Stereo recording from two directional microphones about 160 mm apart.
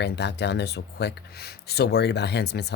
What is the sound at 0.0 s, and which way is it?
Speech, 90° left.